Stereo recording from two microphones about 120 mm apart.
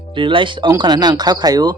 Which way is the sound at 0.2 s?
45° right (ahead or behind).